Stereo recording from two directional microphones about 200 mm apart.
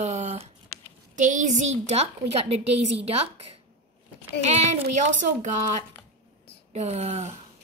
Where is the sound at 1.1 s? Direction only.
40° right (ahead or behind).